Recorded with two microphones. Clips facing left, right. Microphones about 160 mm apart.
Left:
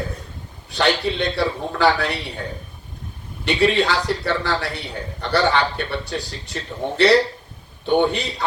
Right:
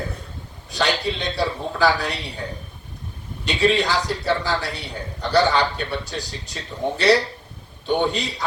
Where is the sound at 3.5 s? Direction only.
60° left (ahead or behind).